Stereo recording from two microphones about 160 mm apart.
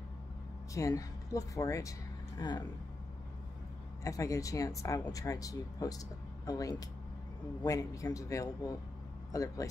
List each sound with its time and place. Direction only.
0.7 s speech: 20° left (ahead or behind)
4.0 s speech: 20° left (ahead or behind)